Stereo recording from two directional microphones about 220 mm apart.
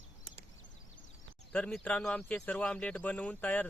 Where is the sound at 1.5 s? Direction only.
5° left (ahead or behind).